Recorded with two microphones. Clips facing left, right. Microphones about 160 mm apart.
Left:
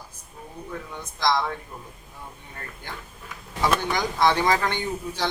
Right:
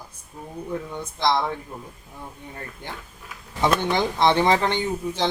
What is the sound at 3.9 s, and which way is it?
Speech, 25° right (ahead or behind).